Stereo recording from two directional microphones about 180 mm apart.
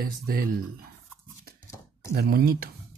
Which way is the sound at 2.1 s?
60° right (ahead or behind).